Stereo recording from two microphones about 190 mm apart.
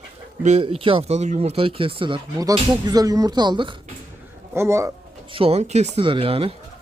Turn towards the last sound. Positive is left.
turn(degrees=-30)  # may be behind; listen again after turning